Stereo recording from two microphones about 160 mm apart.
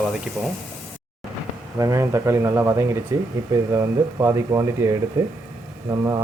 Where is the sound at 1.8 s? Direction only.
20° right (ahead or behind).